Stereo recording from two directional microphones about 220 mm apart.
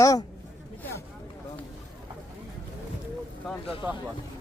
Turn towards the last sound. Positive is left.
turn(degrees=-5)  # may be behind; listen again after turning